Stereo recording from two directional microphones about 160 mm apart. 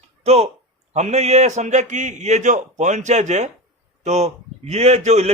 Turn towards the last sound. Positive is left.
turn(degrees=-45)  # may be behind; listen again after turning